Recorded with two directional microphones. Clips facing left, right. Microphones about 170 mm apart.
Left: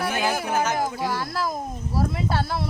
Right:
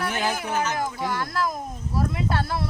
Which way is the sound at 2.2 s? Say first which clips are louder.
Left 1 dB; 5° left (ahead or behind).